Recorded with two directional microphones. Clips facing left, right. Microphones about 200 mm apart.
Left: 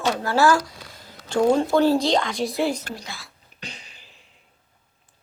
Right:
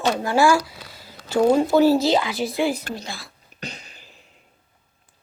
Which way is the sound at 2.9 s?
30° right (ahead or behind).